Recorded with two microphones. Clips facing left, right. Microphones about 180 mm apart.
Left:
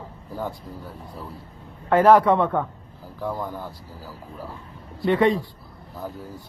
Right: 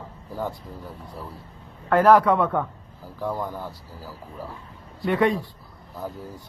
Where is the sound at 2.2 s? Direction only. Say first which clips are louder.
Left 1 dB; 20° left (ahead or behind).